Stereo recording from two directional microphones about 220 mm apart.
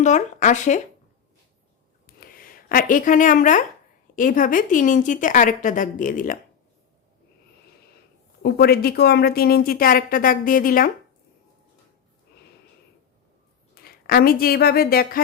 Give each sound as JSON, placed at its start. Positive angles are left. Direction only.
{"t": 0.0, "sound": "a woman's voice", "side_deg": 35}
{"t": 2.0, "sound": "a sound", "side_deg": 40}
{"t": 4.1, "sound": "a woman's voice", "side_deg": 35}
{"t": 8.4, "sound": "a woman's voice", "side_deg": 45}
{"t": 13.7, "sound": "speech", "side_deg": 45}